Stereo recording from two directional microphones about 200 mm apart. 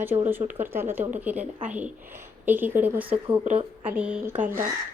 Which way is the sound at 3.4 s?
30° right (ahead or behind).